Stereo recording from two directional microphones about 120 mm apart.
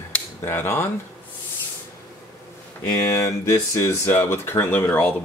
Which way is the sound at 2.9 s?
30° left (ahead or behind).